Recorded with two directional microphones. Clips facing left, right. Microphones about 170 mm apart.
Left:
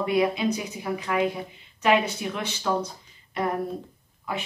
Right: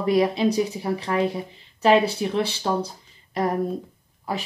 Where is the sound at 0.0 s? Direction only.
35° right (ahead or behind).